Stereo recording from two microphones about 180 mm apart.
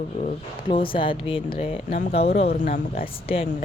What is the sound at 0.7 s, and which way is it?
Speech, 30° left (ahead or behind).